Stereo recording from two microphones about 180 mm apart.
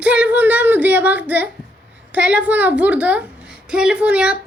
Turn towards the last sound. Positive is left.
turn(degrees=-5)  # may be behind; listen again after turning